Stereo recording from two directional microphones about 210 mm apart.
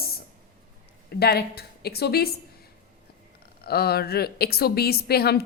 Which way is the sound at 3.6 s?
50° left (ahead or behind).